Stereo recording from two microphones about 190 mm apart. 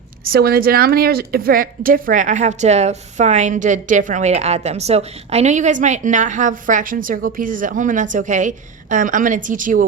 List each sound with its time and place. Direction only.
0.3 s a woman's voice: 55° right (ahead or behind)